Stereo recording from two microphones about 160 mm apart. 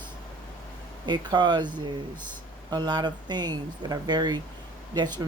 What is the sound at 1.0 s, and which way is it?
Speech, 25° right (ahead or behind).